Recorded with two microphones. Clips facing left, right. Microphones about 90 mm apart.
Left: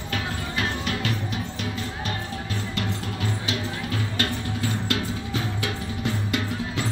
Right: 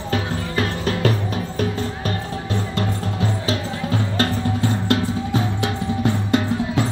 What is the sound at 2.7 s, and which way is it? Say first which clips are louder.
Music: right 5 dB; 30° right (ahead or behind).